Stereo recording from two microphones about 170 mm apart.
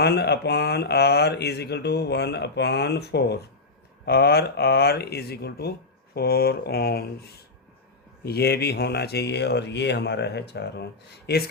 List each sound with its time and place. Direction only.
0.0 s speech: 75° left (ahead or behind)
11.3 s speech: 70° left (ahead or behind)